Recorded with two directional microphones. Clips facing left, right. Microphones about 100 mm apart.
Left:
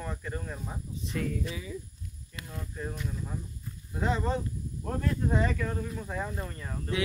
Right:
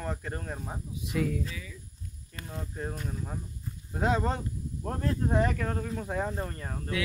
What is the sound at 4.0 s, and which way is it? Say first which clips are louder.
Speech: right 2 dB; 65° right (ahead or behind).